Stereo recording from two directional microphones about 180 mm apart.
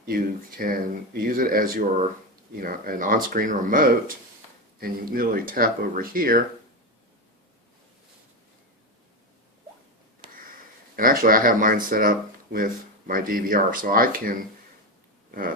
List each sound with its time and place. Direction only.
0.0 s speech: 50° right (ahead or behind)
10.9 s speech: 50° right (ahead or behind)